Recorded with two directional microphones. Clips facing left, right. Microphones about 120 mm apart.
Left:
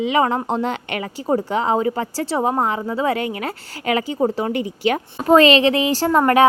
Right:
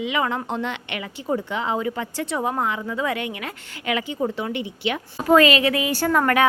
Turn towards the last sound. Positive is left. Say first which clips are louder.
# left 5 dB
turn(degrees=30)  # may be behind; listen again after turning